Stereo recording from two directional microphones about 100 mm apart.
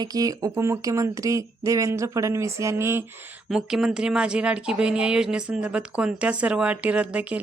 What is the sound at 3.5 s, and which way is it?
Speech, 5° right (ahead or behind).